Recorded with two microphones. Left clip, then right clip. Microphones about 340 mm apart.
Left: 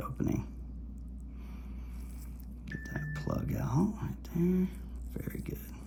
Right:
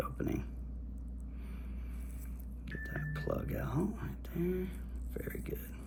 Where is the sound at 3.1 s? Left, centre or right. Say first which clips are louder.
Even; left.